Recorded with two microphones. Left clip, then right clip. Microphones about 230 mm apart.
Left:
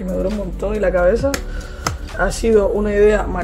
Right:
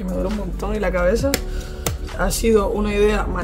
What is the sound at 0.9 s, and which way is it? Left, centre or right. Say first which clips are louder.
A man's voice: left 2 dB; right.